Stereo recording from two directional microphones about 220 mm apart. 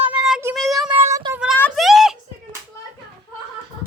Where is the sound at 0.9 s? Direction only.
15° right (ahead or behind).